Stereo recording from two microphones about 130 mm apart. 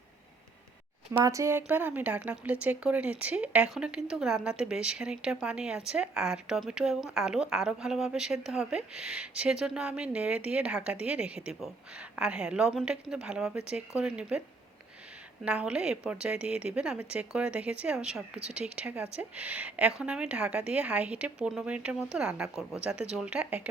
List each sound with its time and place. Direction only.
1.2 s a woman's voice: 25° right (ahead or behind); by 14.4 s 10° right (ahead or behind)
15.4 s a woman's voice: 10° right (ahead or behind)